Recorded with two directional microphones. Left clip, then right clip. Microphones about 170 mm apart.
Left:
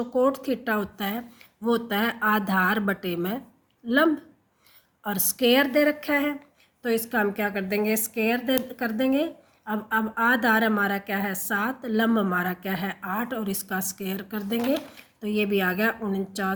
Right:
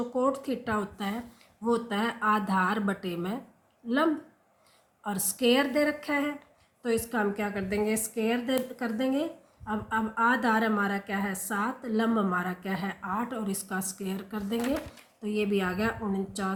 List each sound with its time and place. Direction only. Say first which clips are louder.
0.1 s speech: left 6 dB; 40° left (ahead or behind)